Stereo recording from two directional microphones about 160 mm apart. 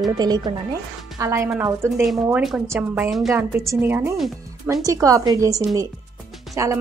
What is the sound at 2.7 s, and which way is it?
Speech, 10° right (ahead or behind).